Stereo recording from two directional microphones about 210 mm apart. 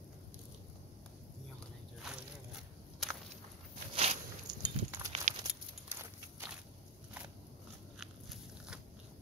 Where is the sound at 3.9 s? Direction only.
30° right (ahead or behind).